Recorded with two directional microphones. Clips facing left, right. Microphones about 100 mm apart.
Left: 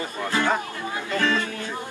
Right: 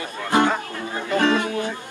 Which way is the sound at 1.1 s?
20° right (ahead or behind).